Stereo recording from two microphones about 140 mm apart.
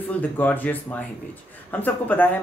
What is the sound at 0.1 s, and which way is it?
Speech, 10° left (ahead or behind).